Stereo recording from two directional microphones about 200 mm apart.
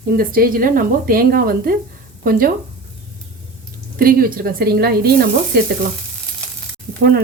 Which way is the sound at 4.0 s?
45° right (ahead or behind).